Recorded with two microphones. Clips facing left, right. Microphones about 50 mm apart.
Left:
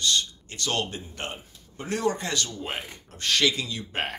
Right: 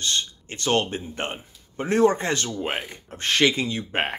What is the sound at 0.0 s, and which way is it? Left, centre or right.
Speech, right.